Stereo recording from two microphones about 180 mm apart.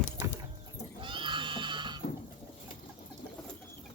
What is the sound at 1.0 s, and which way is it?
Horse, 25° right (ahead or behind).